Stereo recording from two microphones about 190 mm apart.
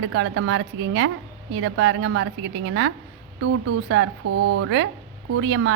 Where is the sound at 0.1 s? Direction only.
90° right.